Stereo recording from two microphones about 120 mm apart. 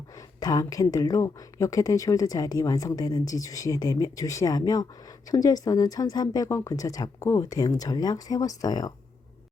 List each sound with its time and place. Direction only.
0.2 s speech: 30° left (ahead or behind)